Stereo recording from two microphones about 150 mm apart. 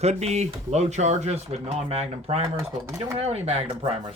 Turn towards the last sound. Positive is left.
turn(degrees=-45)  # may be behind; listen again after turning